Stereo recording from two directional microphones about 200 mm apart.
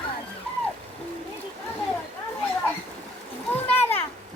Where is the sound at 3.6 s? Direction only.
30° left (ahead or behind).